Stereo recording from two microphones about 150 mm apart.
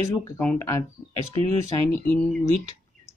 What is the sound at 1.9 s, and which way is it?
Speech, 10° left (ahead or behind).